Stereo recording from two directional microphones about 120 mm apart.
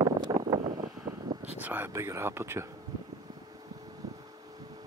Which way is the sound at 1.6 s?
15° right (ahead or behind).